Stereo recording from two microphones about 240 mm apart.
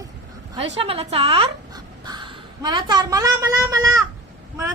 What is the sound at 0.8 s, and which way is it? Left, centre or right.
Speech, right.